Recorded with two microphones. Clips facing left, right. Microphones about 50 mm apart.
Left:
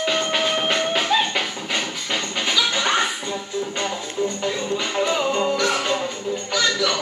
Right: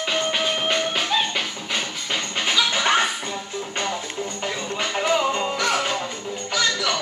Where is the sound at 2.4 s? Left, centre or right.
Centre.